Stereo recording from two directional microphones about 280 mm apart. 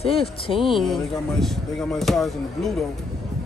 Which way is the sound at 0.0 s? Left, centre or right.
Centre.